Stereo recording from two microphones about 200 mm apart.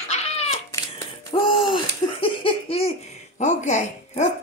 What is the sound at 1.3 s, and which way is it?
Laughter, 25° left (ahead or behind).